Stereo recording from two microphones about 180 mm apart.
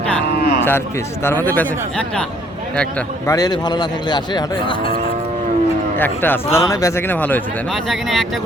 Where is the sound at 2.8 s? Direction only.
15° left (ahead or behind).